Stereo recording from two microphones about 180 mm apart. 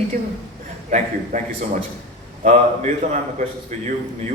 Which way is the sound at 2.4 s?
40° right (ahead or behind).